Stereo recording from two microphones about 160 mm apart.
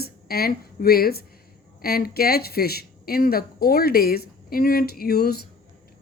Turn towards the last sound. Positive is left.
turn(degrees=75)  # may be behind; listen again after turning